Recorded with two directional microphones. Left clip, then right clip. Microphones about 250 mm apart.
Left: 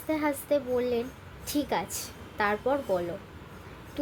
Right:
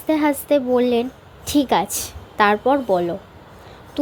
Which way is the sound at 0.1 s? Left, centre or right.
Right.